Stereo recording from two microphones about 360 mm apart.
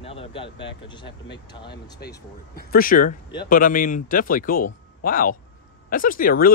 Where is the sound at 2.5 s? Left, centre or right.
Left.